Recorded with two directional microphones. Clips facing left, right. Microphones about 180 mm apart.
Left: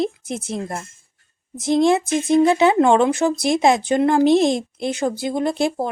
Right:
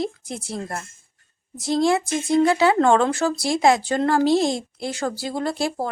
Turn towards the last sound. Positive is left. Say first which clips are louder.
# left 4 dB
turn(degrees=20)  # may be behind; listen again after turning